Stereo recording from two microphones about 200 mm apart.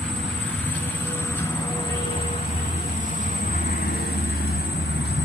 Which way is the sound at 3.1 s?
40° left (ahead or behind).